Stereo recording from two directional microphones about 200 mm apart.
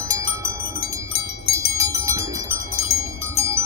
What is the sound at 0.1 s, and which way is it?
Wind chime, 15° right (ahead or behind).